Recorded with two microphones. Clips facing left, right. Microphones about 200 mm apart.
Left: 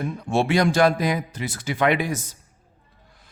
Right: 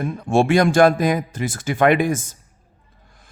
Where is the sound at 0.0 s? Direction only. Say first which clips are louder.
Right 5 dB; 50° right (ahead or behind).